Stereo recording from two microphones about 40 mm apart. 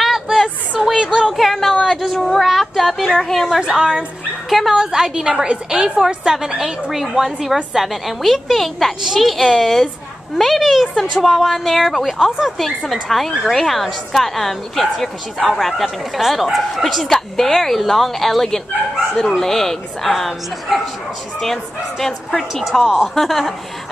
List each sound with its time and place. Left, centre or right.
0.0 s a sound: centre
2.1 s speech: centre
2.4 s a woman's voice: centre
3.6 s speech: right
4.5 s a woman's voice: centre
4.7 s a woman's voice: centre
12.3 s a woman's voice: centre
12.5 s a woman's voice: centre
16.2 s a woman's voice: centre
16.8 s a woman's voice: centre
22.6 s a woman's voice: centre
23.1 s a woman's voice: centre